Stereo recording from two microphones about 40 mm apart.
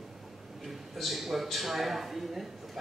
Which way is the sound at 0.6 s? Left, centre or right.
Centre.